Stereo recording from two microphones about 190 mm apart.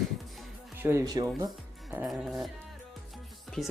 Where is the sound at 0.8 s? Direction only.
15° right (ahead or behind).